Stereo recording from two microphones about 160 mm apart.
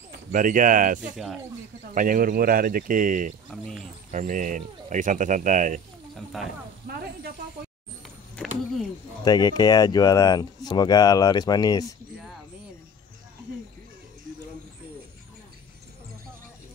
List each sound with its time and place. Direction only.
0.3 s speech: 55° right (ahead or behind)
1.1 s speech: 5° right (ahead or behind)
2.0 s speech: 60° right (ahead or behind)
3.4 s speech: centre (ahead or behind)
4.1 s speech: 55° right (ahead or behind)
6.3 s speech: centre (ahead or behind)
9.2 s speech: 25° left (ahead or behind)